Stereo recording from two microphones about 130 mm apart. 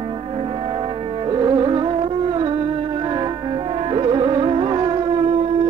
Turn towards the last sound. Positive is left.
turn(degrees=-50)  # may be behind; listen again after turning